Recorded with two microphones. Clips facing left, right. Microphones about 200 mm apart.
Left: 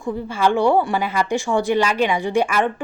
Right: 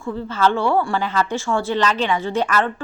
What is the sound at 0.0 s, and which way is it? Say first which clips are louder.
Speech: even; 15° left (ahead or behind).